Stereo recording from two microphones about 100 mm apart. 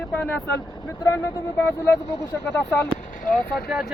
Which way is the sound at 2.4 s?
20° left (ahead or behind).